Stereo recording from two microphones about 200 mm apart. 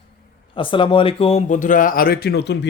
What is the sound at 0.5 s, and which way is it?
Speech, 25° left (ahead or behind).